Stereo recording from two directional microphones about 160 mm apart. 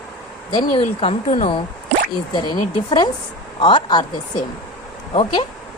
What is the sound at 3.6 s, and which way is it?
Speech, 30° left (ahead or behind).